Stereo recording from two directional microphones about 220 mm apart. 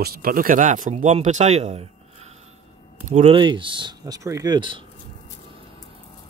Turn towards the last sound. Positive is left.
turn(degrees=-20)  # may be behind; listen again after turning